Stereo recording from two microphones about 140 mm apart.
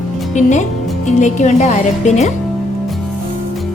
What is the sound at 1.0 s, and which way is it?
A woman's voice, 60° left (ahead or behind).